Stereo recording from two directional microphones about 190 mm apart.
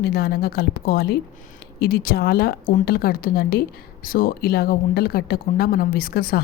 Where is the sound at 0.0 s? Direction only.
55° left (ahead or behind).